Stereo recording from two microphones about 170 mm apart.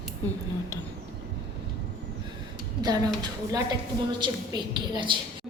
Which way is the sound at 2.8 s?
20° right (ahead or behind).